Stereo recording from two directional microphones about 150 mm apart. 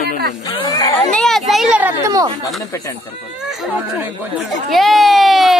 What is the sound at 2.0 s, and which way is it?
Speech, 25° right (ahead or behind).